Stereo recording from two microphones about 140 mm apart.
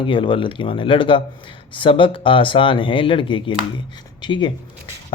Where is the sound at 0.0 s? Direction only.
35° left (ahead or behind).